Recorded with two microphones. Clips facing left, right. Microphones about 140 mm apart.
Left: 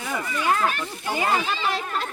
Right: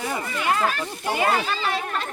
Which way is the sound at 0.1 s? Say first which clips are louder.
Left 3 dB; 30° right (ahead or behind).